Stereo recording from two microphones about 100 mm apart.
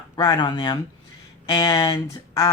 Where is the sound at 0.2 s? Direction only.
45° left (ahead or behind).